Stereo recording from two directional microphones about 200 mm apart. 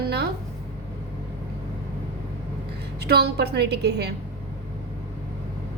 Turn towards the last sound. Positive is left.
turn(degrees=-55)  # may be behind; listen again after turning